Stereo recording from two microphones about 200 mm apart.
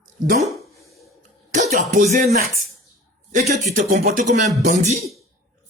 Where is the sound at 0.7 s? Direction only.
15° left (ahead or behind).